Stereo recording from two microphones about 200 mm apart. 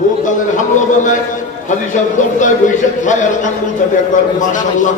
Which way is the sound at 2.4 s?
40° left (ahead or behind).